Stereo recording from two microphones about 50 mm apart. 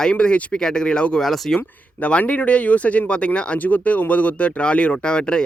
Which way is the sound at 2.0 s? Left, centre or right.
Left.